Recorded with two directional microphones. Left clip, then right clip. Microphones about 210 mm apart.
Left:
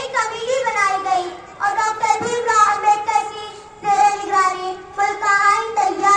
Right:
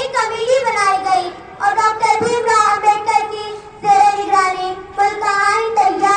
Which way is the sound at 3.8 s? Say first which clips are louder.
Right 4 dB; 30° right (ahead or behind).